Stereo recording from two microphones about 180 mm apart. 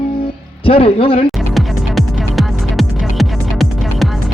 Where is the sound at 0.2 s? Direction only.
30° left (ahead or behind).